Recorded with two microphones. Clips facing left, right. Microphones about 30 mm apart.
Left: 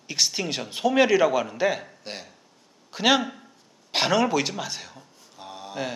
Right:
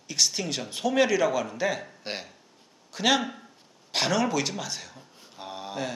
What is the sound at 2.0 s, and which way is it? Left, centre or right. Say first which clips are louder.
Speech: right 2 dB; centre.